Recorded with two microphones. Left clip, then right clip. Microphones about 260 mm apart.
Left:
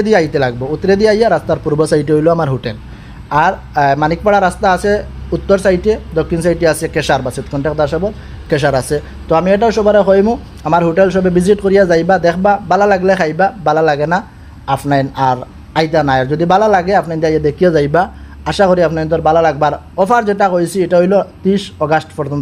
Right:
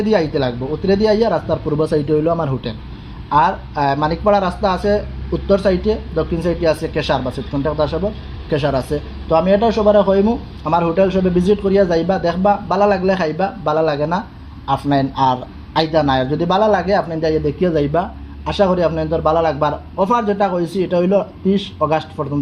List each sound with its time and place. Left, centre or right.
0.0 s a man's voice: left